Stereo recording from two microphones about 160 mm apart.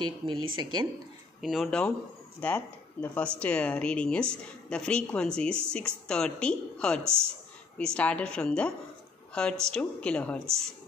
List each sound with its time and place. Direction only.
0.0 s speech: 30° right (ahead or behind)
1.4 s a woman's voice: centre (ahead or behind)